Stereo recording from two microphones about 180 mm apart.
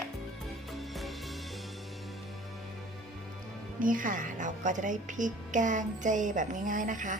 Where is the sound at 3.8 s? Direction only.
50° right (ahead or behind).